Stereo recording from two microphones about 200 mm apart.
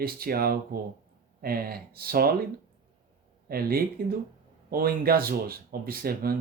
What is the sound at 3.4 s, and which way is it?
Speech, 50° right (ahead or behind).